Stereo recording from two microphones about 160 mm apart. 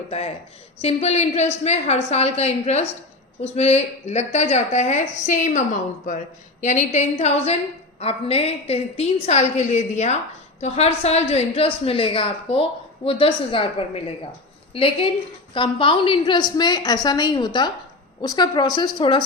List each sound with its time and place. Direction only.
0.1 s a woman's voice: 40° left (ahead or behind)